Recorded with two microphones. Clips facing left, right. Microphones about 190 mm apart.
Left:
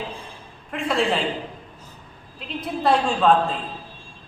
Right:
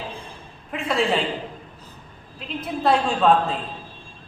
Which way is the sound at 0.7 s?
Centre (ahead or behind).